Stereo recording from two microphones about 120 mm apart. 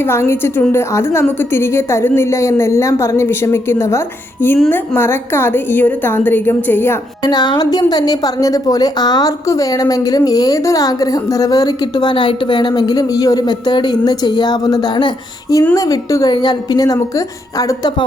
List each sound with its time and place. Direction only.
0.0 s a woman's voice: 20° left (ahead or behind)
7.3 s a woman's voice: 35° left (ahead or behind)